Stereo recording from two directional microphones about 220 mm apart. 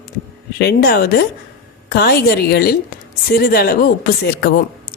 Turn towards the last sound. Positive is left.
turn(degrees=45)  # may be behind; listen again after turning